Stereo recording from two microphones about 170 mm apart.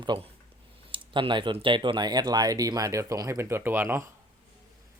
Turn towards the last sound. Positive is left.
turn(degrees=-15)  # may be behind; listen again after turning